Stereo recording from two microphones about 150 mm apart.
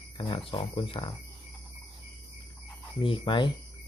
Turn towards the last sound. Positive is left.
turn(degrees=30)  # may be behind; listen again after turning